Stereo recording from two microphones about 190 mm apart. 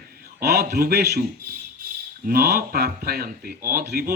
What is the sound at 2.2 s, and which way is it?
Speech, 55° right (ahead or behind).